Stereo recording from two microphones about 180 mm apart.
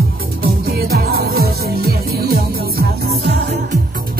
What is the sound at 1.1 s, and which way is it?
Music, 60° right (ahead or behind).